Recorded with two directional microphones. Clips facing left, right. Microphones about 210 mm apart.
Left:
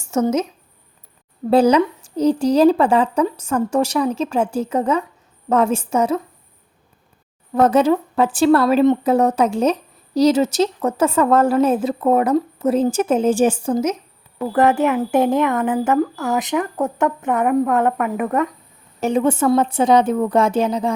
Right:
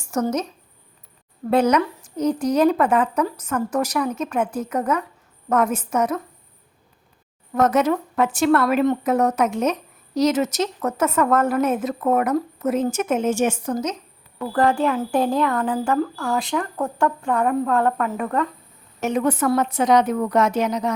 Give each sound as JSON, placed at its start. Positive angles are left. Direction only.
{"t": 0.0, "sound": "speech", "side_deg": 25}
{"t": 1.5, "sound": "a woman's voice", "side_deg": 30}
{"t": 7.5, "sound": "a woman's voice", "side_deg": 30}
{"t": 18.9, "sound": "a woman's voice", "side_deg": 30}